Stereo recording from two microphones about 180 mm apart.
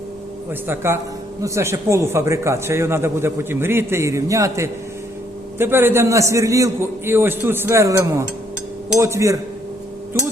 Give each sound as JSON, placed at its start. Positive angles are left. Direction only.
{"t": 0.7, "sound": "speech", "side_deg": -15}